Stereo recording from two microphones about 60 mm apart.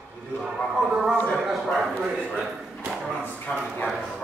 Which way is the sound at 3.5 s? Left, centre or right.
Left.